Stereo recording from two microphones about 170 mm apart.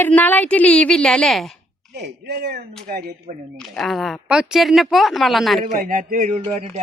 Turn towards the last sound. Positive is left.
turn(degrees=-35)  # may be behind; listen again after turning